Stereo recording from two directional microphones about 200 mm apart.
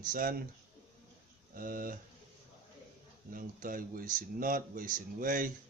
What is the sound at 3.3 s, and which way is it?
Speech, 45° right (ahead or behind).